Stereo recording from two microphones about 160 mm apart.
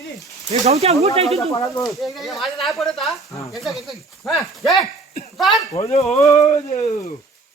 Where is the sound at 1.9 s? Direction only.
Centre (ahead or behind).